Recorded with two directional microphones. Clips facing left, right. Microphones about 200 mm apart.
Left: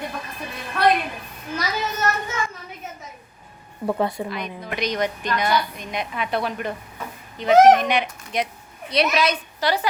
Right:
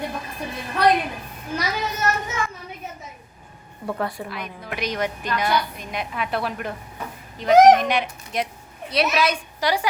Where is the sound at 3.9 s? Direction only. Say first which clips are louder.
Left 4 dB; 20° left (ahead or behind).